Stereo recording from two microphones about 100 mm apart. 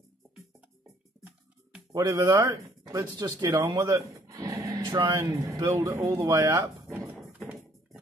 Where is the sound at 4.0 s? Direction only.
35° right (ahead or behind).